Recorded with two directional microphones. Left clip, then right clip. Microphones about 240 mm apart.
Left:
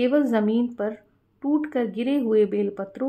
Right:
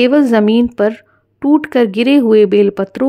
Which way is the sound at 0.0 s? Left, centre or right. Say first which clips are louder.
Right 11 dB; right.